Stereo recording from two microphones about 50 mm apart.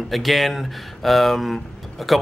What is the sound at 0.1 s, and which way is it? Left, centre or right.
Speech, centre.